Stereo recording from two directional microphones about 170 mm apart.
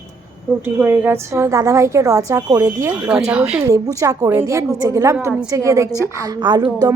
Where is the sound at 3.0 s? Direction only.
5° right (ahead or behind).